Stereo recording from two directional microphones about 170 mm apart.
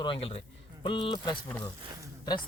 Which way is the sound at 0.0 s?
30° left (ahead or behind).